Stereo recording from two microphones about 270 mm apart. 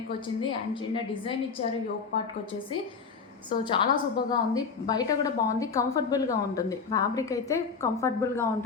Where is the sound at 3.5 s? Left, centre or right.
Centre.